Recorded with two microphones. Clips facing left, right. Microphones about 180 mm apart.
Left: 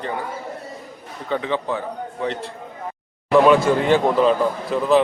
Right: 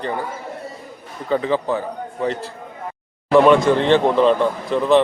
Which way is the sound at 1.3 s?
Centre (ahead or behind).